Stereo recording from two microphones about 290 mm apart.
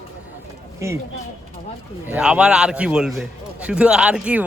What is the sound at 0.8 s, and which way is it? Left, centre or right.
Speech, centre.